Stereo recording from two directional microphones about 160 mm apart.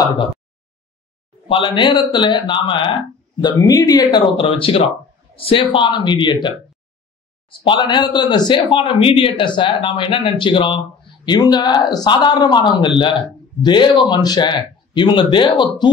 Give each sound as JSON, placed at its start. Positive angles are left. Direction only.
{"t": 0.0, "sound": "speech", "side_deg": 25}
{"t": 1.5, "sound": "speech", "side_deg": 30}